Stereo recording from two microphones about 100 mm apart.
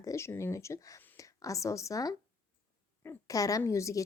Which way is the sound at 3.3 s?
35° left (ahead or behind).